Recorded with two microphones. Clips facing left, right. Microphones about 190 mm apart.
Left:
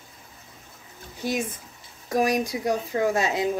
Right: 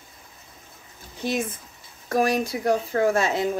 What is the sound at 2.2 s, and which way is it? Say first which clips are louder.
Speech: right 1 dB; 15° left (ahead or behind).